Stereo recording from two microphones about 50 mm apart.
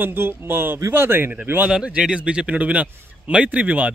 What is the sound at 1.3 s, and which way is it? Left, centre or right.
Speech, right.